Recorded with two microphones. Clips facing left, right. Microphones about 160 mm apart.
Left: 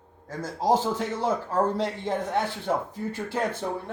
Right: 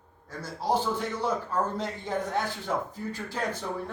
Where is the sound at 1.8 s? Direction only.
75° left (ahead or behind).